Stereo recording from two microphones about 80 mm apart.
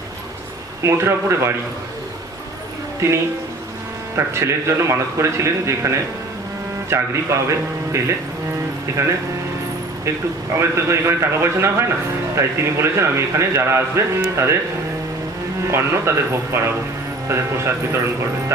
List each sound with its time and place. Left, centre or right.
0.8 s a man's voice: right
3.0 s a woman's voice: right
6.9 s a man's voice: right
10.5 s a man's voice: right
15.6 s a man's voice: right